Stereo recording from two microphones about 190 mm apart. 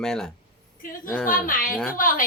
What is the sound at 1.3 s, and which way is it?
Speech, 45° left (ahead or behind).